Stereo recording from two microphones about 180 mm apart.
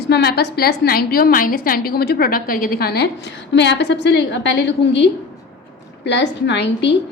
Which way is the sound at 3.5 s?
75° left (ahead or behind).